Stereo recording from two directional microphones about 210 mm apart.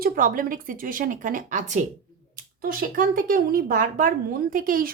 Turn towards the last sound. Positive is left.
turn(degrees=-40)  # may be behind; listen again after turning